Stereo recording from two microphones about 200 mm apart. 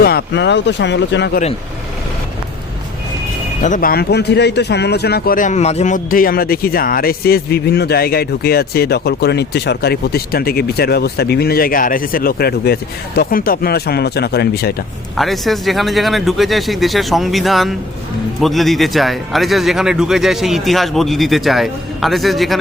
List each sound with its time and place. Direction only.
0.0 s speech: 50° left (ahead or behind)
3.6 s speech: 40° left (ahead or behind)
15.1 s speech: centre (ahead or behind)